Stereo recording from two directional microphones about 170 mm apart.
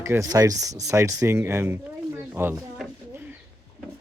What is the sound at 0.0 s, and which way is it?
Speech, 15° right (ahead or behind).